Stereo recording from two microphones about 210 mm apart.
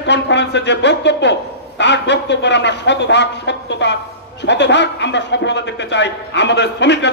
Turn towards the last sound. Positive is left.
turn(degrees=55)  # may be behind; listen again after turning